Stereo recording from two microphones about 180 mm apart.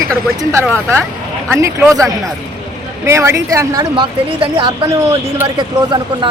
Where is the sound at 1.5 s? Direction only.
15° right (ahead or behind).